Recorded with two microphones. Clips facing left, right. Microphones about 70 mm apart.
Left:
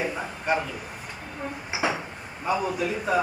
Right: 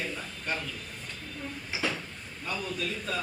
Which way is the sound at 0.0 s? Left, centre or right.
Left.